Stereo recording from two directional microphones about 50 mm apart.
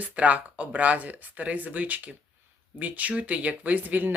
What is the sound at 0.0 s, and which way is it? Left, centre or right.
Speech, right.